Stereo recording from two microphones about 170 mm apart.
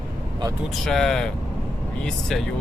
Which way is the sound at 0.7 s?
Centre (ahead or behind).